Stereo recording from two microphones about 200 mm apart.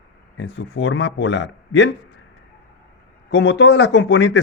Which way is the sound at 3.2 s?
55° left (ahead or behind).